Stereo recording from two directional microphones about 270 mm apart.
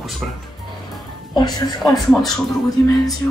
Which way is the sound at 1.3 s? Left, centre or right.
Centre.